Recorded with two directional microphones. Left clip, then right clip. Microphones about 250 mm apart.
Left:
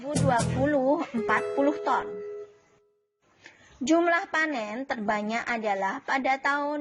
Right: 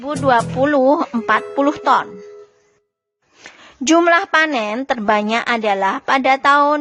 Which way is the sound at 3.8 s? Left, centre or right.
Right.